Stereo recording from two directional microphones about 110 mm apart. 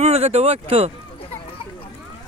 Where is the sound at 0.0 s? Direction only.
70° right (ahead or behind).